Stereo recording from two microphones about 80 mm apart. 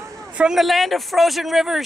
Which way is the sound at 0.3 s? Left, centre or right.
Centre.